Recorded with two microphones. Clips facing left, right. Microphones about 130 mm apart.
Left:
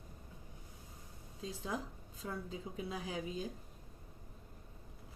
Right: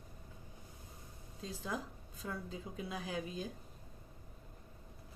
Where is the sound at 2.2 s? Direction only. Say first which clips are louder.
Left 1 dB; 20° left (ahead or behind).